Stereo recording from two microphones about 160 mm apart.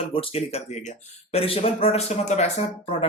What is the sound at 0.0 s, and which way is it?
Speech, 35° left (ahead or behind).